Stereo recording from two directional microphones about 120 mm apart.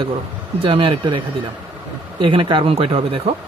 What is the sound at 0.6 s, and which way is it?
Speech, 45° right (ahead or behind).